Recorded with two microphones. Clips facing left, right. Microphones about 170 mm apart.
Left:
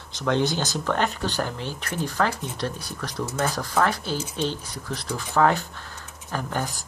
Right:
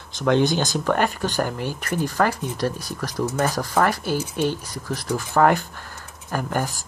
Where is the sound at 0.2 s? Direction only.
15° right (ahead or behind).